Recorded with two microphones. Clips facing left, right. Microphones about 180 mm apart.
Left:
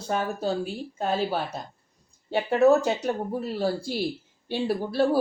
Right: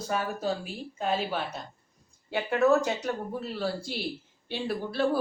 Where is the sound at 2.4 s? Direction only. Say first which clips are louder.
Left 4 dB; 35° left (ahead or behind).